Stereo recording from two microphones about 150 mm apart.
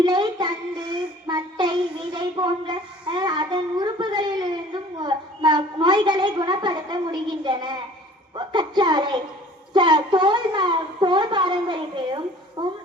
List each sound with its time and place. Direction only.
0.0 s child singing: 30° right (ahead or behind)
8.4 s a woman's voice: 30° right (ahead or behind)